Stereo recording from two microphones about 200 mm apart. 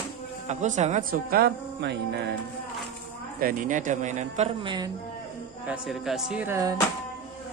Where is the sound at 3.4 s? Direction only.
45° right (ahead or behind); by 4.9 s 20° right (ahead or behind).